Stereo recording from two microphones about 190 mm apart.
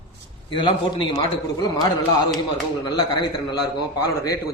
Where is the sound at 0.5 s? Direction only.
25° left (ahead or behind).